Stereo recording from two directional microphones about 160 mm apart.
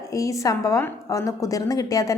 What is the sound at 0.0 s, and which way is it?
A woman's voice, 20° left (ahead or behind).